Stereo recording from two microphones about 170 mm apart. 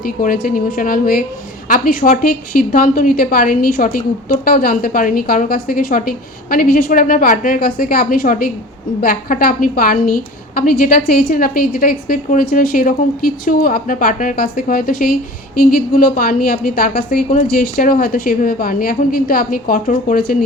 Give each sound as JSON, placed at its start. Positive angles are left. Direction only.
{"t": 0.0, "sound": "a woman's voice", "side_deg": 55}